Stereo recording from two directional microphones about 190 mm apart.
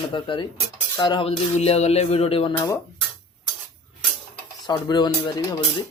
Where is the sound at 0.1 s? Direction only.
25° left (ahead or behind).